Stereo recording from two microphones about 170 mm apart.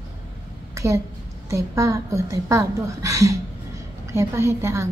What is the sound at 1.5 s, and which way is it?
A woman's voice, 20° right (ahead or behind).